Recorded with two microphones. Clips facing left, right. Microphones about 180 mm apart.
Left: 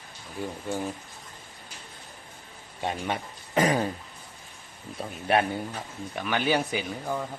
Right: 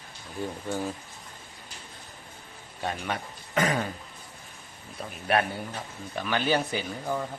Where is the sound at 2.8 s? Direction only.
25° left (ahead or behind).